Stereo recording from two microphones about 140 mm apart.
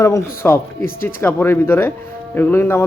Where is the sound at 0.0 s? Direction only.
20° left (ahead or behind).